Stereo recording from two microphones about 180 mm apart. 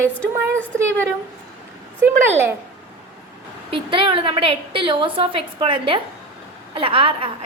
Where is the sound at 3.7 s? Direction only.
30° right (ahead or behind).